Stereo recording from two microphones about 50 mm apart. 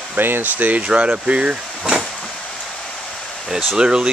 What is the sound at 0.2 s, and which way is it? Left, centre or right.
Speech, right.